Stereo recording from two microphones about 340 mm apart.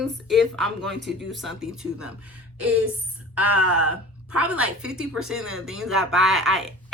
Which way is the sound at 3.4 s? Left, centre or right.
Right.